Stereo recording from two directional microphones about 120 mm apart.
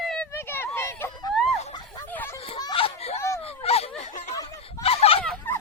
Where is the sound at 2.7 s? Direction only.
55° left (ahead or behind).